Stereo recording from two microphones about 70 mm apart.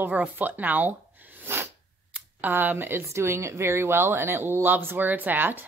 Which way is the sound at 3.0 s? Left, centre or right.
Right.